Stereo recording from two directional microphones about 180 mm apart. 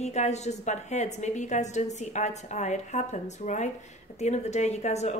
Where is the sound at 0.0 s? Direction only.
40° left (ahead or behind).